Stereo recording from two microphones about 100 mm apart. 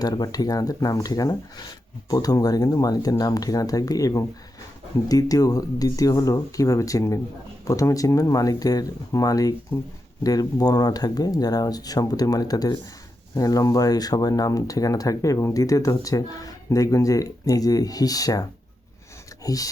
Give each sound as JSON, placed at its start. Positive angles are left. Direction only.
{"t": 0.0, "sound": "speech", "side_deg": 40}